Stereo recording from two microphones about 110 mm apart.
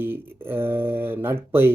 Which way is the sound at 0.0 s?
20° right (ahead or behind).